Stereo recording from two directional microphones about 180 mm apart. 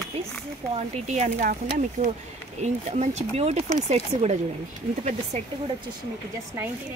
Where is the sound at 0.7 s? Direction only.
40° right (ahead or behind).